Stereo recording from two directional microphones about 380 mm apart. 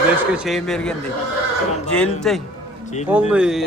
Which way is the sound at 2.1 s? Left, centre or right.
Centre.